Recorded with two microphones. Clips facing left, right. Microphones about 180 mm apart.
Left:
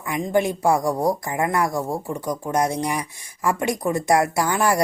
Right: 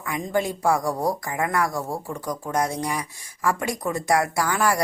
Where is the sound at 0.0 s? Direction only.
20° left (ahead or behind).